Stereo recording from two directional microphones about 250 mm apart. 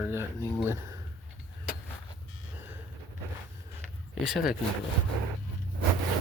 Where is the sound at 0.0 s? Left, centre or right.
Centre.